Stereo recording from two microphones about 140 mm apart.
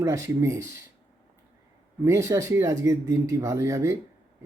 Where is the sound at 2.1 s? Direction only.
20° right (ahead or behind).